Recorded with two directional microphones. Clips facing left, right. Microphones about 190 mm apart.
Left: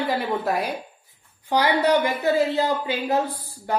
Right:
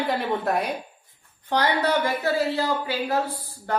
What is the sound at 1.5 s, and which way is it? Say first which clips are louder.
A woman's voice: left 3 dB; 15° left (ahead or behind).